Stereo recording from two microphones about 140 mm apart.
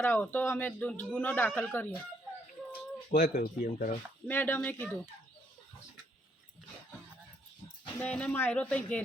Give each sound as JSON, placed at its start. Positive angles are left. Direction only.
{"t": 0.0, "sound": "speech", "side_deg": 10}
{"t": 3.1, "sound": "speech", "side_deg": 90}
{"t": 4.3, "sound": "speech", "side_deg": 15}
{"t": 8.0, "sound": "speech", "side_deg": 10}